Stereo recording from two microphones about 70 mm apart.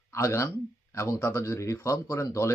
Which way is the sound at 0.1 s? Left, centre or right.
Left.